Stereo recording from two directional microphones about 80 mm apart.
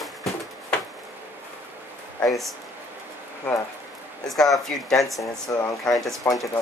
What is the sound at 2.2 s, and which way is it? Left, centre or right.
Speech, centre.